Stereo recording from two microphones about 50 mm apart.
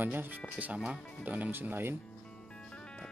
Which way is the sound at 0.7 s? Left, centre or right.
Centre.